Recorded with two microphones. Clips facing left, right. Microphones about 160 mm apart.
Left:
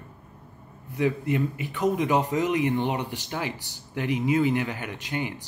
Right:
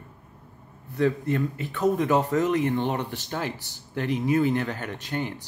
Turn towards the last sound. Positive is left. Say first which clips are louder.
# right 1 dB
turn(degrees=15)  # may be behind; listen again after turning